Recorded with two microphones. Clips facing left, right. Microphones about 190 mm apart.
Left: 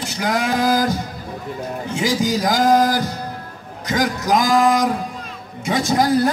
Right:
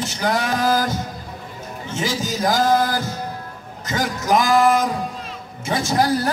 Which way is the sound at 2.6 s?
35° left (ahead or behind).